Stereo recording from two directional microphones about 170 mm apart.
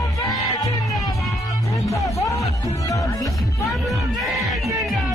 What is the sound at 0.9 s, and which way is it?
Music, centre (ahead or behind).